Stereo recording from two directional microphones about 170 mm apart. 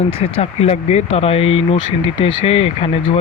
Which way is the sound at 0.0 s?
35° left (ahead or behind).